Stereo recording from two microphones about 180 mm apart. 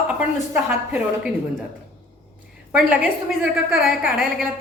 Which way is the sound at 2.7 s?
5° right (ahead or behind).